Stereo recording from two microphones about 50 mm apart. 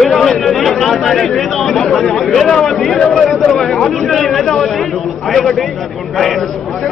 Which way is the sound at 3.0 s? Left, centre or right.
Centre.